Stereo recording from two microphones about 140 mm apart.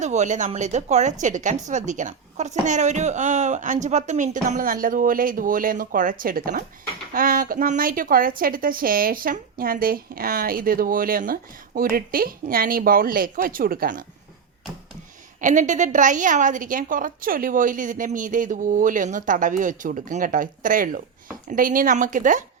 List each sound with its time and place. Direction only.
0.0 s a woman's voice: 55° right (ahead or behind); by 6.7 s 90° right
7.1 s a woman's voice: 80° right
15.4 s a woman's voice: 65° right (ahead or behind)